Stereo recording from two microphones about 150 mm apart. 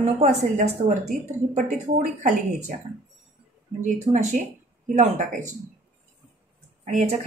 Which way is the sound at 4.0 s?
50° right (ahead or behind).